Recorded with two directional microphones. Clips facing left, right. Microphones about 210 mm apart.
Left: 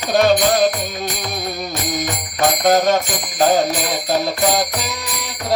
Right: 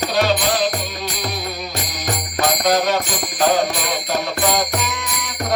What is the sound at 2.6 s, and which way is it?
Music, 45° left (ahead or behind).